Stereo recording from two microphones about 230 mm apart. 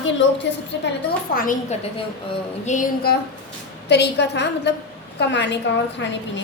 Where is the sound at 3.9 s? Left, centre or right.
Left.